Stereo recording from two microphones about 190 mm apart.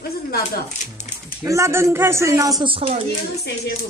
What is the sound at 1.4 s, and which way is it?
Speech, 15° right (ahead or behind).